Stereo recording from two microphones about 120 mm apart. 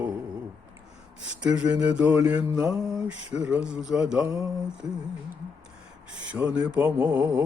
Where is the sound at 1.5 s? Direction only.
10° right (ahead or behind).